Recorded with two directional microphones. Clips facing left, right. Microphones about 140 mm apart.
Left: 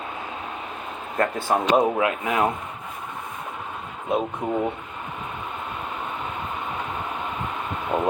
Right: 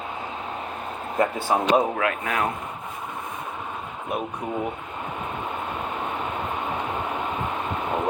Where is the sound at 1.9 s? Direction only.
20° left (ahead or behind).